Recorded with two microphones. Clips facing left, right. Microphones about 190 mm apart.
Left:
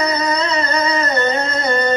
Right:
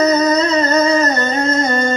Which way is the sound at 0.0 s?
45° right (ahead or behind).